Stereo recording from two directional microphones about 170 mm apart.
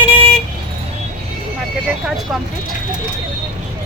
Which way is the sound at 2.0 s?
Centre (ahead or behind).